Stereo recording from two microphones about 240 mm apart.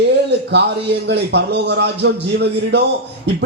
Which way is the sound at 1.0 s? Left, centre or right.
Right.